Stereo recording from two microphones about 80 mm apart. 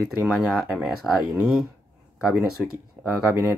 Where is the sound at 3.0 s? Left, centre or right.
Right.